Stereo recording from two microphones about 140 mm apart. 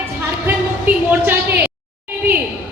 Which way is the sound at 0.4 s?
15° right (ahead or behind).